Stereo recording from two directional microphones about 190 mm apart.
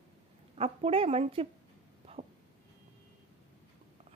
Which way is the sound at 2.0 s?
35° right (ahead or behind).